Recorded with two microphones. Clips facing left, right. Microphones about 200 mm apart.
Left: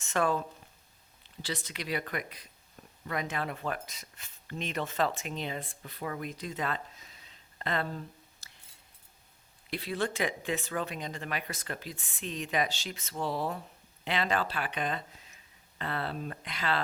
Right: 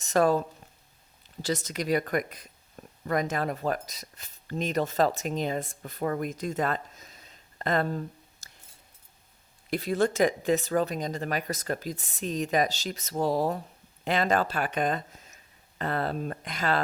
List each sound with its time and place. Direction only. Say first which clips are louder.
0.0 s speech: right 6 dB; 40° right (ahead or behind)
9.6 s speech: right 7 dB; 45° right (ahead or behind)